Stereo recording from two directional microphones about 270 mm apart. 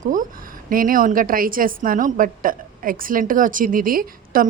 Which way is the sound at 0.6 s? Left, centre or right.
Right.